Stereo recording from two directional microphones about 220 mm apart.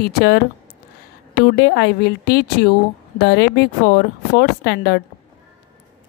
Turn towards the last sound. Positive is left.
turn(degrees=50)  # may be behind; listen again after turning